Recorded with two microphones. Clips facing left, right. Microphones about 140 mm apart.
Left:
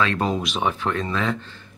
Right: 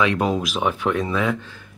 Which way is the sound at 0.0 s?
15° right (ahead or behind).